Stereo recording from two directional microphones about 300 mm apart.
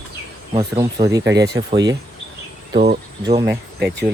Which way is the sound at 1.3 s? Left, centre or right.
Right.